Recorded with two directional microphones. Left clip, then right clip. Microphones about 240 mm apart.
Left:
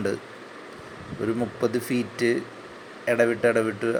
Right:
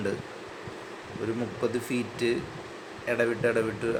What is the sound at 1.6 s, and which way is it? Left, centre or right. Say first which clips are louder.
Speech: left 4 dB; centre.